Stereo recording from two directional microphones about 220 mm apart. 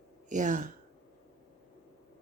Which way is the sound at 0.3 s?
35° right (ahead or behind).